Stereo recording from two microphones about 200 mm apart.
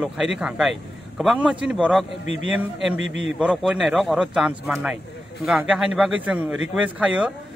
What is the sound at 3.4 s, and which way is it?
A man's voice, centre (ahead or behind).